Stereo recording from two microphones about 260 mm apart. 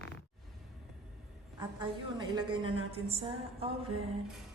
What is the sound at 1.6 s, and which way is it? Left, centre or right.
A woman's voice, centre.